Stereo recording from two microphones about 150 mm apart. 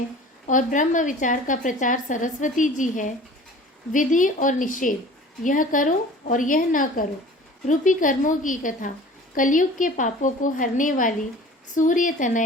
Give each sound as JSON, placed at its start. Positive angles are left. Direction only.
{"t": 0.4, "sound": "a woman's voice", "side_deg": 60}